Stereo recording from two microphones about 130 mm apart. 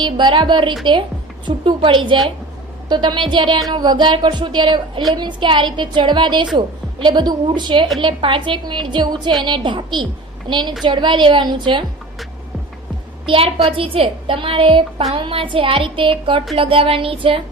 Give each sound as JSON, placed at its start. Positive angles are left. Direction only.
{"t": 0.0, "sound": "a woman's voice", "side_deg": -40}
{"t": 13.2, "sound": "a woman's voice", "side_deg": -45}